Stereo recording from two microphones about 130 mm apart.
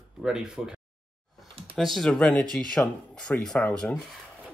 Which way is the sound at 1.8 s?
Centre (ahead or behind).